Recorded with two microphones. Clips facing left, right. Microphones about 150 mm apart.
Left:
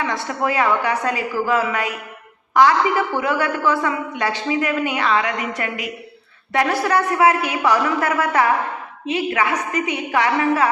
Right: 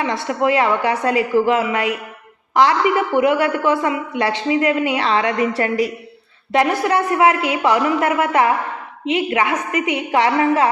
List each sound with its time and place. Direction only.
0.0 s a woman's voice: 20° right (ahead or behind)
6.5 s a woman's voice: 20° right (ahead or behind)